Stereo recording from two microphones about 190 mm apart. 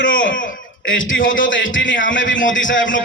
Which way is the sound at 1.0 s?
90° left.